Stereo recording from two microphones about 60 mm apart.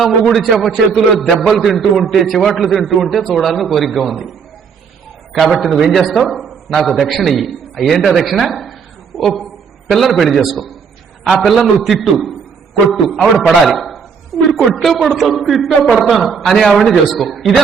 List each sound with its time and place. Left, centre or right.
0.0 s a man's voice: centre
5.3 s a man's voice: centre
15.8 s a man's voice: centre
16.0 s a man's voice: centre